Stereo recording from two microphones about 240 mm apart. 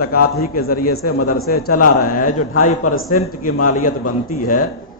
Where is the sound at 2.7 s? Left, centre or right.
Left.